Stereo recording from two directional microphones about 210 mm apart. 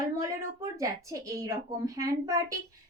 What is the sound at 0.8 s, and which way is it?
A woman's voice, 15° right (ahead or behind).